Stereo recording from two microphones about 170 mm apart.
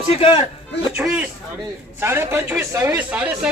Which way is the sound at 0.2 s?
30° left (ahead or behind).